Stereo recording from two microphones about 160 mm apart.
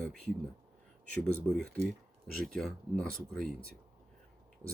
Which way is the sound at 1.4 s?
5° left (ahead or behind).